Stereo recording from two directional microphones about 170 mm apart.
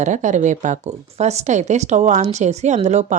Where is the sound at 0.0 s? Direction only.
45° right (ahead or behind).